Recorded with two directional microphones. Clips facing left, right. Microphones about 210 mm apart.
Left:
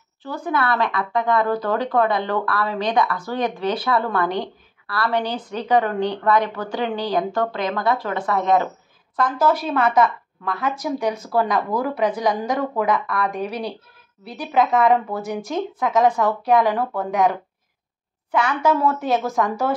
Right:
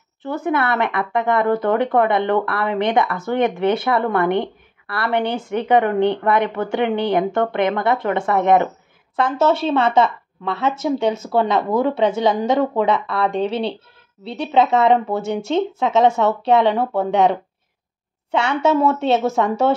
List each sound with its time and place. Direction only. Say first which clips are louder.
0.2 s speech: right 3 dB; 25° right (ahead or behind)